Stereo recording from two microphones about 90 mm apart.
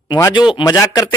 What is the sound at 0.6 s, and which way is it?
Speech, 45° left (ahead or behind).